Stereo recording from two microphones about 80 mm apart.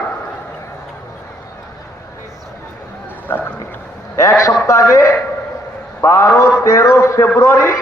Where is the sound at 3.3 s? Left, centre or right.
Left.